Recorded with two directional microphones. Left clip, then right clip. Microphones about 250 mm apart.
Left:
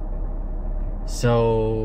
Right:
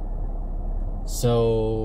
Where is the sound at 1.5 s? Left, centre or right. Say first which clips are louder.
Left 2 dB; centre.